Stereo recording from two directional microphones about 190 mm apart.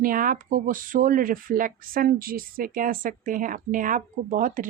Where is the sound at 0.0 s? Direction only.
45° right (ahead or behind).